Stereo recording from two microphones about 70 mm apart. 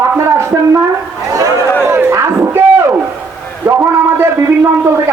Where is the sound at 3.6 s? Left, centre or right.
Right.